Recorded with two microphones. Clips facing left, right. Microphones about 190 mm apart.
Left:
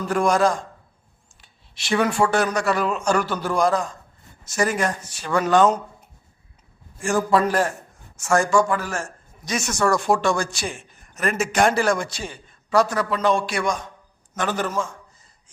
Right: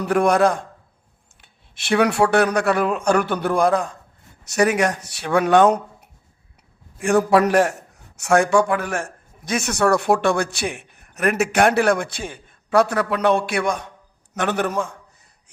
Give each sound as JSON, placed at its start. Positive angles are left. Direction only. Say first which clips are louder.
{"t": 0.0, "sound": "a man's voice", "louder": "right 3 dB", "side_deg": -60}
{"t": 7.0, "sound": "a man's voice", "louder": "right 4 dB", "side_deg": -65}